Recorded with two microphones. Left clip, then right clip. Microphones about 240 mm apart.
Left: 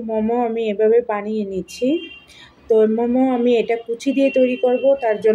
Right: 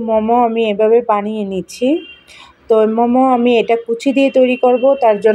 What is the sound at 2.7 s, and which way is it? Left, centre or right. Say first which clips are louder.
Speech: right 4 dB; centre.